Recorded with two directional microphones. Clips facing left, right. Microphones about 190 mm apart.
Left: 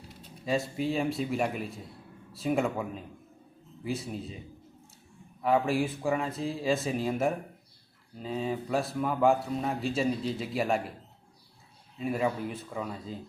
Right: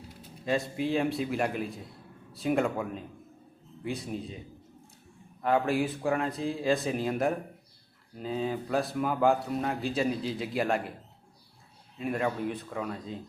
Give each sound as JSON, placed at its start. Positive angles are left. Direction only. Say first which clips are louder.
{"t": 0.4, "sound": "speech", "louder": "even", "side_deg": 0}
{"t": 5.4, "sound": "speech", "louder": "even", "side_deg": 0}
{"t": 11.9, "sound": "speech", "louder": "left 1 dB", "side_deg": 0}